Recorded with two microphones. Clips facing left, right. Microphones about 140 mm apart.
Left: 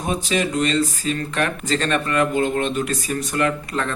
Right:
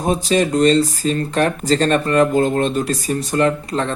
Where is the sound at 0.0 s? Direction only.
35° right (ahead or behind).